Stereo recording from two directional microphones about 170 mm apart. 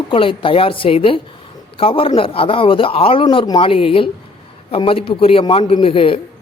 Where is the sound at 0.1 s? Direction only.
30° left (ahead or behind).